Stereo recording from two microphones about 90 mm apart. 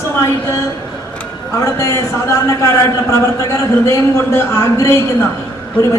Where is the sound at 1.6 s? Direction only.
30° left (ahead or behind).